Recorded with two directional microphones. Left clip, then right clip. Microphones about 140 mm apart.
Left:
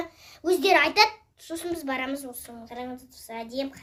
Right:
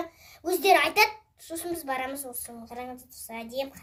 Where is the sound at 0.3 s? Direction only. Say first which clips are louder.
Even; 35° left (ahead or behind).